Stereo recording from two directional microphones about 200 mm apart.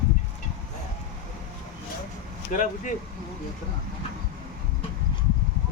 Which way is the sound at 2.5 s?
40° left (ahead or behind).